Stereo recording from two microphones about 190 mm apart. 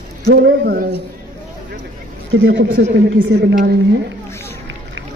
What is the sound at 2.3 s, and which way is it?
A woman's voice, 80° right.